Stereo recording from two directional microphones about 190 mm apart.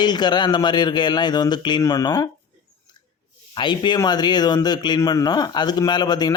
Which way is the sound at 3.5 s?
25° left (ahead or behind).